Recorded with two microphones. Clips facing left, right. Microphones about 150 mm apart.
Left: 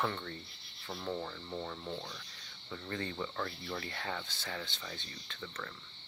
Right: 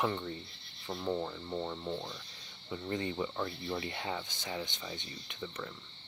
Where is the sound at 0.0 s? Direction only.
15° right (ahead or behind).